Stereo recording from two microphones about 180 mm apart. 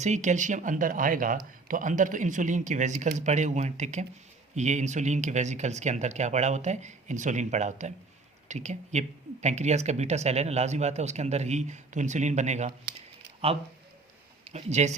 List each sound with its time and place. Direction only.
0.0 s speech: 40° right (ahead or behind)
14.5 s speech: 40° right (ahead or behind)